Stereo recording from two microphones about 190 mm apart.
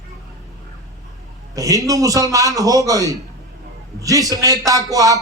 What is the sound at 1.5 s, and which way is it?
A man's voice, 20° right (ahead or behind).